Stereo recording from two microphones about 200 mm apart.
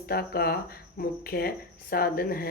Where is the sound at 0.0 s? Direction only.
50° left (ahead or behind).